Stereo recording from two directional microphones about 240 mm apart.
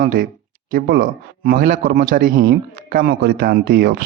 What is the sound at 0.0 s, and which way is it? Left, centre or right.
A man's voice, right.